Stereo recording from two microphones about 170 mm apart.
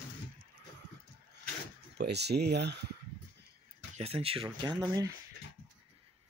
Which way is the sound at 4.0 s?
35° right (ahead or behind).